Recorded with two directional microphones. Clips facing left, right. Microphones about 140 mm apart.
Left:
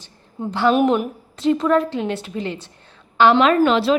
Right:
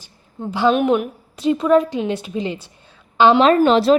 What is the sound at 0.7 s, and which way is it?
Speech, centre (ahead or behind).